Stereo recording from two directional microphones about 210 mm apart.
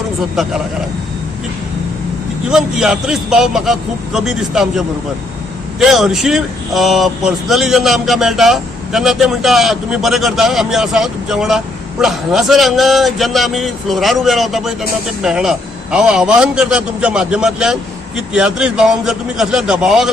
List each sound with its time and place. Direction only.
2.5 s speech: centre (ahead or behind)
5.8 s speech: centre (ahead or behind)